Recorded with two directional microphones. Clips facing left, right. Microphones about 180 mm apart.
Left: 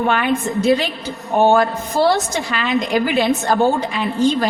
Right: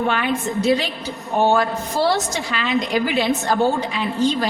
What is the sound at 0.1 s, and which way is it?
A woman's voice, 55° left (ahead or behind).